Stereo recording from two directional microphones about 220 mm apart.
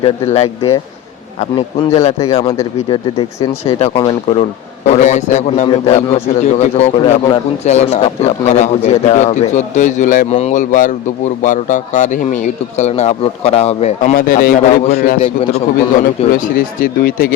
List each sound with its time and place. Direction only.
0.0 s a man's voice: 30° left (ahead or behind)
16.8 s a man's voice: 40° left (ahead or behind)